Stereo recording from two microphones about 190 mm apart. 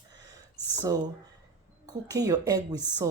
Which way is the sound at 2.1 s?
20° right (ahead or behind).